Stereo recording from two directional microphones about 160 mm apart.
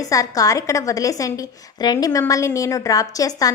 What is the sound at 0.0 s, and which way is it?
A woman's voice, 20° left (ahead or behind).